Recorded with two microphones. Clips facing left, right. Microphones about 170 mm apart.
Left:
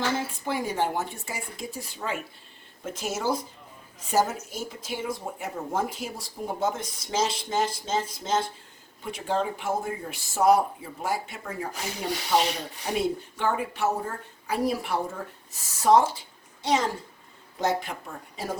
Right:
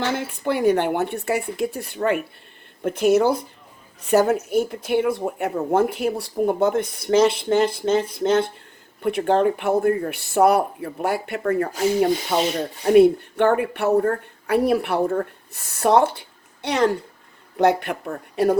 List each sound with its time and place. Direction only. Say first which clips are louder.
0.0 s speech: right 4 dB; 65° right (ahead or behind)